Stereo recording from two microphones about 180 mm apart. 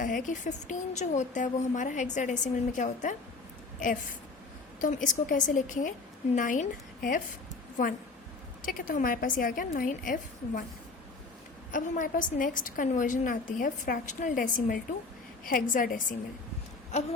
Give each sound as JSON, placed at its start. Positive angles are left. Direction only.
{"t": 0.0, "sound": "a woman's voice", "side_deg": 45}
{"t": 8.6, "sound": "a woman's voice", "side_deg": 50}
{"t": 11.7, "sound": "a woman's voice", "side_deg": 50}